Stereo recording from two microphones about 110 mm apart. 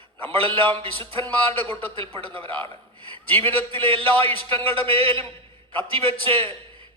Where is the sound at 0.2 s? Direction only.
55° right (ahead or behind).